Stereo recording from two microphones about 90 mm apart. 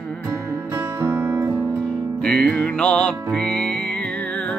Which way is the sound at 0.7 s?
25° right (ahead or behind).